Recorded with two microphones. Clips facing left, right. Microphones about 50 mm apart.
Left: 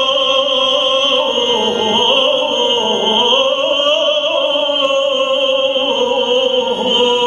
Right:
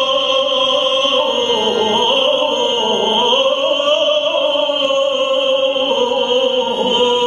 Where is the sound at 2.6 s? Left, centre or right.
Left.